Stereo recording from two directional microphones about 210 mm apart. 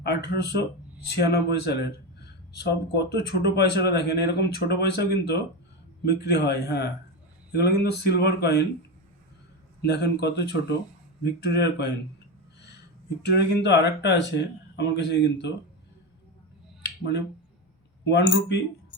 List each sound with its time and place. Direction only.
0.0 s speech: 50° left (ahead or behind)
9.8 s speech: 55° left (ahead or behind)
13.2 s speech: 50° left (ahead or behind)
16.8 s finger snapping: 55° left (ahead or behind)
18.0 s speech: 55° left (ahead or behind)